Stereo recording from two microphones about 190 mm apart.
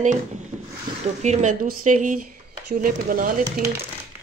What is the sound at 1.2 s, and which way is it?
Speech, 40° right (ahead or behind).